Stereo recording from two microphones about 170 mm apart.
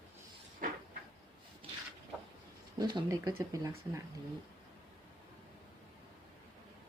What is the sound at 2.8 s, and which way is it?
Speech, 25° right (ahead or behind).